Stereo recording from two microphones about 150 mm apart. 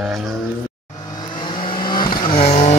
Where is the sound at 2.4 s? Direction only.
45° left (ahead or behind).